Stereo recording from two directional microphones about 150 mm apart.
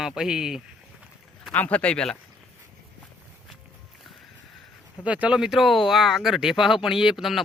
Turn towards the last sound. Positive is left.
turn(degrees=0)  # may be behind; listen again after turning